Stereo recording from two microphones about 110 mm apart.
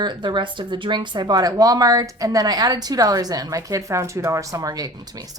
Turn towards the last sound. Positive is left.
turn(degrees=-35)  # may be behind; listen again after turning